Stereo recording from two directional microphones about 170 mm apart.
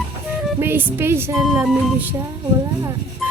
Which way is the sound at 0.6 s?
15° right (ahead or behind).